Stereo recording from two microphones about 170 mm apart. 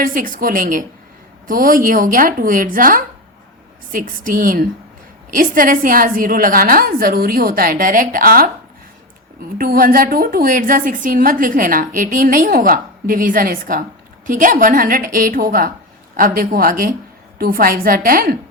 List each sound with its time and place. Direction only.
0.0 s a woman's voice: 55° right (ahead or behind)
9.6 s a woman's voice: 55° right (ahead or behind)